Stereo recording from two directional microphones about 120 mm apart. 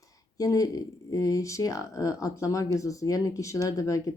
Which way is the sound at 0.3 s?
30° left (ahead or behind).